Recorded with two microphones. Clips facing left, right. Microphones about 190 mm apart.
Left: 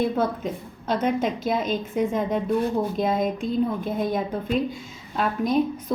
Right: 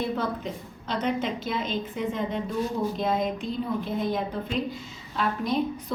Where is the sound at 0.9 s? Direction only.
50° left (ahead or behind).